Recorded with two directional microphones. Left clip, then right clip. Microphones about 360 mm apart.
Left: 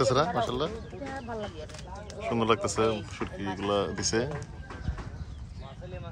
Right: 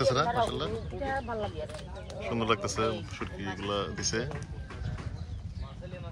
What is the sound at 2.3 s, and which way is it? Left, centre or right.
Speech, centre.